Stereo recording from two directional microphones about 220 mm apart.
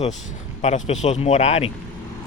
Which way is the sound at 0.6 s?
30° left (ahead or behind).